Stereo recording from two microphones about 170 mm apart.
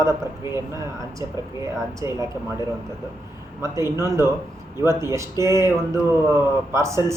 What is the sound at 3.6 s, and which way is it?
Speech, 15° right (ahead or behind).